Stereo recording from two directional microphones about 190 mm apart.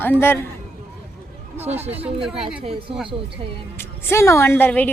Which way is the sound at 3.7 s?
10° left (ahead or behind).